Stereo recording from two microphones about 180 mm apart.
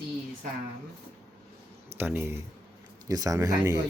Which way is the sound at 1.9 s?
10° right (ahead or behind).